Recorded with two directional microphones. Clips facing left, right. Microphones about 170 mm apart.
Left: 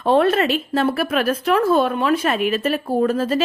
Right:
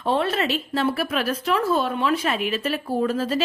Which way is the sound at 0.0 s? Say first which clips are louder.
Left 6 dB; 55° left (ahead or behind).